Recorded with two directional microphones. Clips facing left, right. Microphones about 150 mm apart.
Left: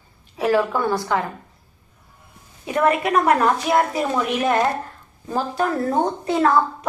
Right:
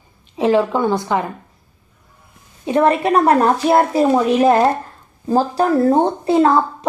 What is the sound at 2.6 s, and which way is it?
A woman's voice, 30° right (ahead or behind).